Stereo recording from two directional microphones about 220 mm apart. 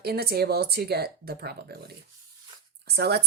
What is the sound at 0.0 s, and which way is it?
Speech, 45° right (ahead or behind).